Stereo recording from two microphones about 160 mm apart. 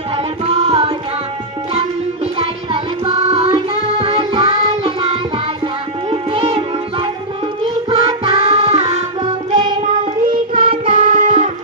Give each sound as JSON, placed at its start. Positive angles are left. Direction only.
{"t": 0.2, "sound": "music", "side_deg": -40}
{"t": 2.4, "sound": "music", "side_deg": -35}
{"t": 10.5, "sound": "music", "side_deg": -35}
{"t": 11.1, "sound": "music", "side_deg": -50}